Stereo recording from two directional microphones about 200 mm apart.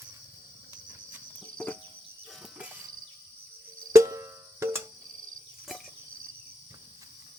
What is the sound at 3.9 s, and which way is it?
Music, 15° right (ahead or behind).